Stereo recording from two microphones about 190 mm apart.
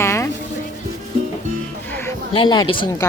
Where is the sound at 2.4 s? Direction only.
25° left (ahead or behind).